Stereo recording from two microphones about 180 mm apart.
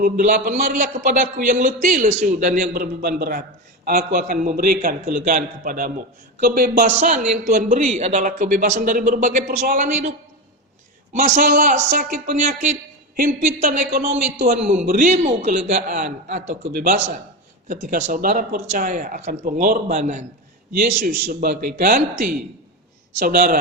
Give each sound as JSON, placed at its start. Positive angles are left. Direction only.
{"t": 0.0, "sound": "speech", "side_deg": -50}
{"t": 11.1, "sound": "speech", "side_deg": -45}
{"t": 13.9, "sound": "speech", "side_deg": -80}
{"t": 14.4, "sound": "speech", "side_deg": -40}
{"t": 21.2, "sound": "speech", "side_deg": -55}
{"t": 23.2, "sound": "speech", "side_deg": -55}